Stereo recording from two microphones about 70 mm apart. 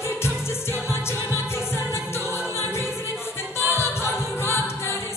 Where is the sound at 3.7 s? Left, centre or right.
Left.